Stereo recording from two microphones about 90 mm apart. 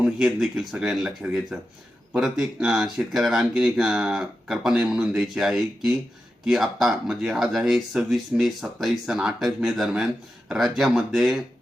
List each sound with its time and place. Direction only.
0.0 s speech: 5° right (ahead or behind)